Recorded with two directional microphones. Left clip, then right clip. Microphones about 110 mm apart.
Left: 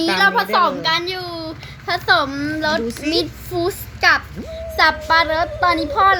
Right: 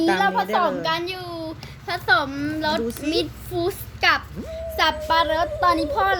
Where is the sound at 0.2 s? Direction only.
70° left (ahead or behind).